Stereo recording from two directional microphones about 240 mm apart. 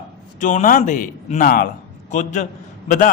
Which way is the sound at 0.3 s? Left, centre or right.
Left.